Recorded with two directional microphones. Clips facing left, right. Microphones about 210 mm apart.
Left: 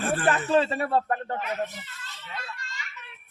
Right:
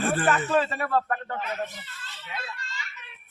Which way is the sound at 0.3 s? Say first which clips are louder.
Left 4 dB; 30° left (ahead or behind).